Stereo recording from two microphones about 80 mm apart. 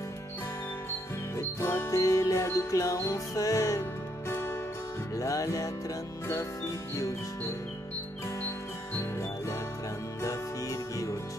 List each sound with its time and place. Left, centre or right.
1.3 s music: left
4.3 s music: left
5.1 s music: left
10.2 s music: left